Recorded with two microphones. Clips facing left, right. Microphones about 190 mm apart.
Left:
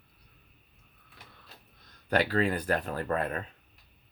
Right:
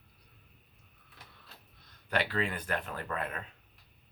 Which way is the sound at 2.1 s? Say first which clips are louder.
Left 6 dB; 40° left (ahead or behind).